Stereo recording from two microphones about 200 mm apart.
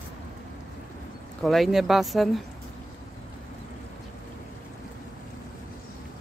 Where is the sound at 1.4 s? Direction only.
Centre (ahead or behind).